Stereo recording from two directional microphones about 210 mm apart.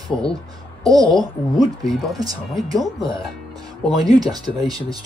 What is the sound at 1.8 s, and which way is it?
Speech, centre (ahead or behind).